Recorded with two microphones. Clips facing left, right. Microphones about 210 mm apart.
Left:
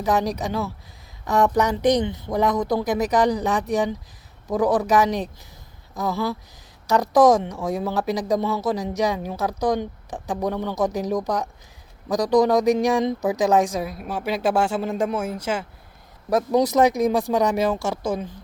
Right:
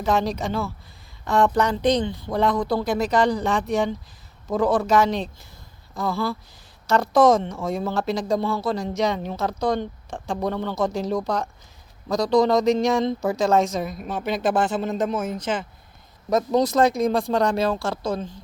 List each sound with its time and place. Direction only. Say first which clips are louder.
0.0 s speech: even; 15° left (ahead or behind)